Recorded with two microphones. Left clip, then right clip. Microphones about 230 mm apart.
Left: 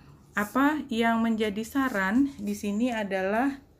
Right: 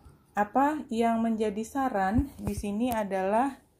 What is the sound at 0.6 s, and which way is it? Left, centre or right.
A woman's voice, centre.